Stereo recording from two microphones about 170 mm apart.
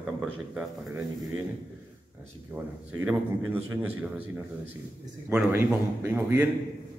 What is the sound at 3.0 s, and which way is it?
A man's voice, 10° right (ahead or behind).